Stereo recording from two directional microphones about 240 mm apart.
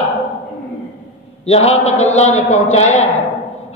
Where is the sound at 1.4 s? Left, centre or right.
Left.